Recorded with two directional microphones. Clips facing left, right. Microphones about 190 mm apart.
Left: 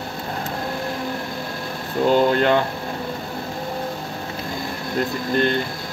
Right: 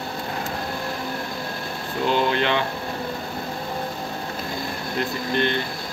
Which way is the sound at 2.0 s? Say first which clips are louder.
Left 5 dB; 45° left (ahead or behind).